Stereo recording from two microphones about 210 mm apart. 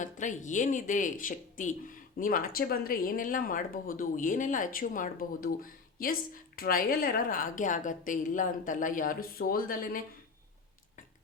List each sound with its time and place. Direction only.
0.0 s speech: 35° left (ahead or behind)